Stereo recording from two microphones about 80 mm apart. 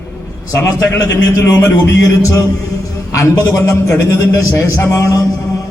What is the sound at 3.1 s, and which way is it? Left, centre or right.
A man's voice, left.